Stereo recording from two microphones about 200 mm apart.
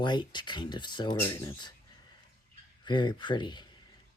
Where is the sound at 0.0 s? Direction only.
20° left (ahead or behind).